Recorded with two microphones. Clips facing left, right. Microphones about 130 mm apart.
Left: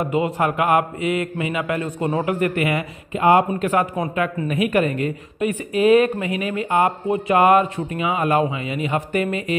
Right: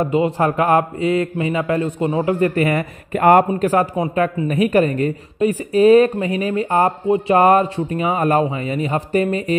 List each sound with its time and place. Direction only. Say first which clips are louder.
0.0 s speech: right 3 dB; 30° right (ahead or behind)
3.1 s speech: right 3 dB; 50° right (ahead or behind); by 3.9 s 35° right (ahead or behind)
3.9 s speech: right 3 dB; 25° right (ahead or behind)
4.4 s speech: right 3 dB; 35° right (ahead or behind)